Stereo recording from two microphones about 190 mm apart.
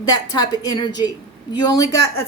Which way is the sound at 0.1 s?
20° left (ahead or behind).